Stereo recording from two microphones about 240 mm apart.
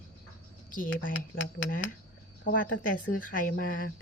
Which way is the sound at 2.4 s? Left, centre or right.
Left.